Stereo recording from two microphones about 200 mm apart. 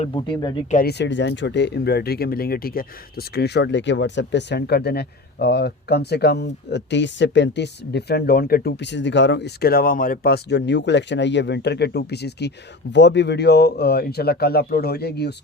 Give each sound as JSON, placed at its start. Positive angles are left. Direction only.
{"t": 0.0, "sound": "speech", "side_deg": 25}
{"t": 0.7, "sound": "speech", "side_deg": 50}